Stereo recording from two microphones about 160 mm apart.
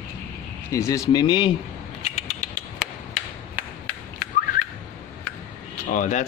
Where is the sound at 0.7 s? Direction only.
20° left (ahead or behind).